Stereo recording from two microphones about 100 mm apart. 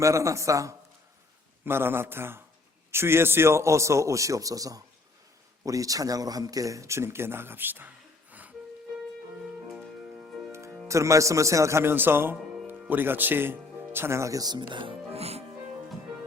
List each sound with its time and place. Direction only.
0.0 s a man's voice: 30° right (ahead or behind); by 8.5 s 15° right (ahead or behind)
10.8 s speech: 30° right (ahead or behind); by 14.9 s 55° right (ahead or behind)
15.1 s music: 90° right